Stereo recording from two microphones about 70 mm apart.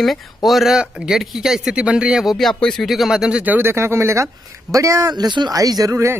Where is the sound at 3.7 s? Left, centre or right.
Right.